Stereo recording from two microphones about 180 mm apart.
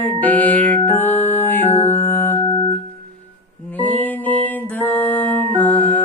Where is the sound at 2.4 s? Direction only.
25° left (ahead or behind).